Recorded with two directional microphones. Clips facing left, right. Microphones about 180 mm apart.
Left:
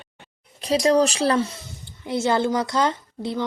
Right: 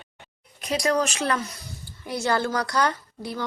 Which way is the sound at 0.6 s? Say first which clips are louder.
Left 6 dB; 30° left (ahead or behind).